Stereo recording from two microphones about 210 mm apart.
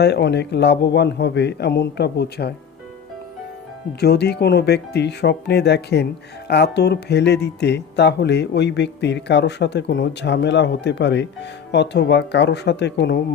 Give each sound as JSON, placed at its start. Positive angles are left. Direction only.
{"t": 0.0, "sound": "speech", "side_deg": 55}
{"t": 4.0, "sound": "speech", "side_deg": 50}